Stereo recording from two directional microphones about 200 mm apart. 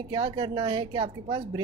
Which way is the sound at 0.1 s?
25° right (ahead or behind).